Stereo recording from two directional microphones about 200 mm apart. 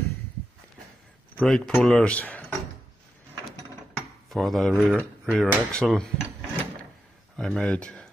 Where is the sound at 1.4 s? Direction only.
Centre (ahead or behind).